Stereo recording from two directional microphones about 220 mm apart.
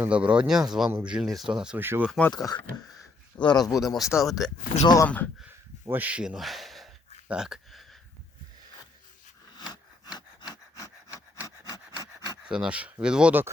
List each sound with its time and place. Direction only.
0.0 s speech: 5° right (ahead or behind)
2.3 s speech: 15° left (ahead or behind)
4.3 s speech: centre (ahead or behind)
5.8 s speech: 10° right (ahead or behind)
7.3 s a sound: 5° right (ahead or behind)
10.5 s a sound: 15° left (ahead or behind)
12.4 s speech: 5° right (ahead or behind)